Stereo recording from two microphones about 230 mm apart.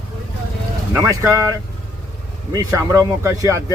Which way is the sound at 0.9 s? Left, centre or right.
Centre.